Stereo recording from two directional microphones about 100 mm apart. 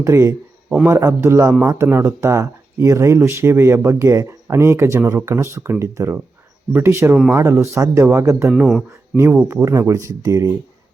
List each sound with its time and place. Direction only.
0.0 s speech: 30° right (ahead or behind)
8.5 s speech: 5° right (ahead or behind)
9.1 s speech: 25° right (ahead or behind)